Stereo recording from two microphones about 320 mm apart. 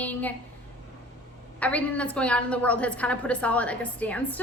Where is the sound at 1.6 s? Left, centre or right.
Centre.